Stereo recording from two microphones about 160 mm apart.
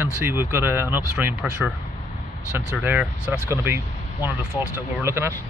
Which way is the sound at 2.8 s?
10° right (ahead or behind).